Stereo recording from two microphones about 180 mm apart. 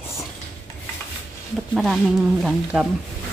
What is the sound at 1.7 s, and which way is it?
Speech, centre (ahead or behind).